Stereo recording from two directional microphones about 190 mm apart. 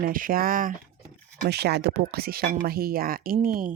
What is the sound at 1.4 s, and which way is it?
Speech, 60° right (ahead or behind).